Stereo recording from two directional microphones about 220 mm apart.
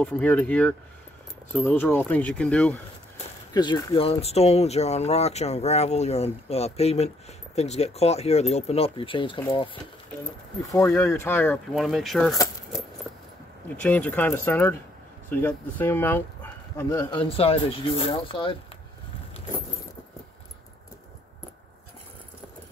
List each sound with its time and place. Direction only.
0.0 s speech: 5° left (ahead or behind)
3.5 s speech: 20° left (ahead or behind)
10.6 s speech: 15° left (ahead or behind)
13.7 s speech: 5° left (ahead or behind)
17.3 s speech: 25° left (ahead or behind)